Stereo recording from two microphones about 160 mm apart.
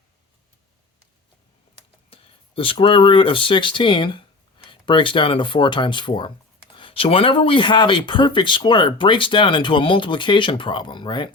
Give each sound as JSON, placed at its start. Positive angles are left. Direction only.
{"t": 2.0, "sound": "speech", "side_deg": 35}